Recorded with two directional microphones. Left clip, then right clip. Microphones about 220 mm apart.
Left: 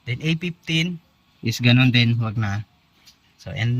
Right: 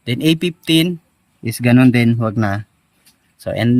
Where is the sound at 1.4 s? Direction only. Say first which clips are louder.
Right 6 dB; 20° right (ahead or behind).